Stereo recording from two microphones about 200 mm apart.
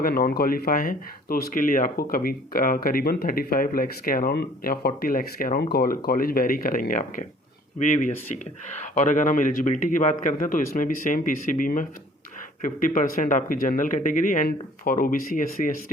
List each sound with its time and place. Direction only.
0.0 s a man's voice: 50° left (ahead or behind)